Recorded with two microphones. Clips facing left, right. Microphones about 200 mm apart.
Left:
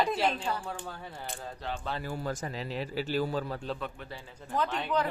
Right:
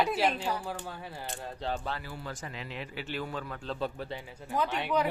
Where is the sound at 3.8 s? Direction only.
30° right (ahead or behind).